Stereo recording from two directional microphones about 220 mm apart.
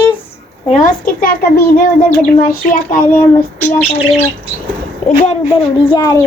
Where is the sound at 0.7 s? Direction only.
40° left (ahead or behind).